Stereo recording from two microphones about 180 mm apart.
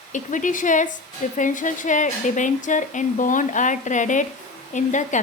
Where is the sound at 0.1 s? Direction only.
45° left (ahead or behind).